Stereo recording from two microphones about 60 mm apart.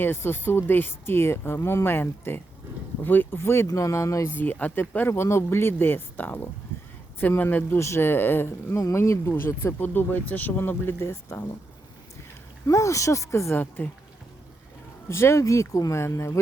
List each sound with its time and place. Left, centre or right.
0.0 s speech: left
3.3 s speech: left
3.7 s speech: left
4.3 s speech: left
4.8 s speech: left
7.8 s speech: left
8.8 s speech: left
9.8 s speech: left
10.6 s speech: left
11.1 s speech: left
12.6 s speech: left
13.6 s speech: left
15.1 s speech: left